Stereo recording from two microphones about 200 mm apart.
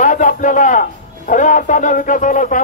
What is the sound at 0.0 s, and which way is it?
A man's voice, 40° left (ahead or behind).